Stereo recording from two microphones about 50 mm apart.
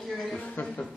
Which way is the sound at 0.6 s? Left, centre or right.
Left.